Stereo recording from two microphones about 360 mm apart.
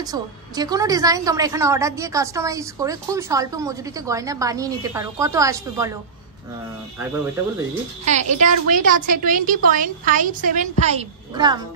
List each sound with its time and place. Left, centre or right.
0.0 s a woman's voice: centre
8.0 s a woman's voice: centre